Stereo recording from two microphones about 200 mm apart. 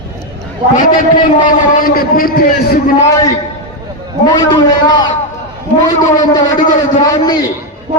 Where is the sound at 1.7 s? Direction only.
45° left (ahead or behind).